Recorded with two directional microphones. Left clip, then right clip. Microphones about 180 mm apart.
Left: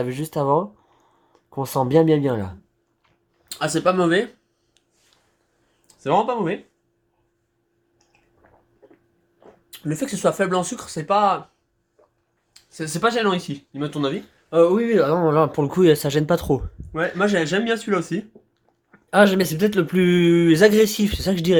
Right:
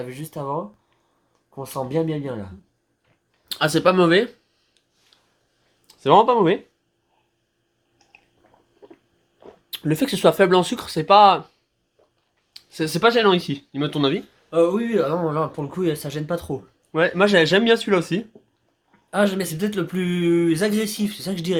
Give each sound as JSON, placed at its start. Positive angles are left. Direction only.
{"t": 0.0, "sound": "speech", "side_deg": 55}
{"t": 3.5, "sound": "speech", "side_deg": -35}
{"t": 5.9, "sound": "speech", "side_deg": -40}
{"t": 8.4, "sound": "a sound", "side_deg": 40}
{"t": 9.4, "sound": "speech", "side_deg": -40}
{"t": 12.5, "sound": "speech", "side_deg": -35}
{"t": 14.5, "sound": "speech", "side_deg": 35}
{"t": 16.9, "sound": "speech", "side_deg": -45}
{"t": 18.9, "sound": "speech", "side_deg": 40}